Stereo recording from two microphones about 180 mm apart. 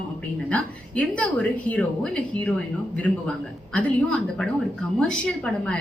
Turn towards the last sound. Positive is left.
turn(degrees=5)  # may be behind; listen again after turning